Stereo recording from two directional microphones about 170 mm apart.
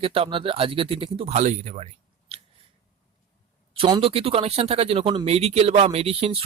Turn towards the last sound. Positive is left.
turn(degrees=-35)  # may be behind; listen again after turning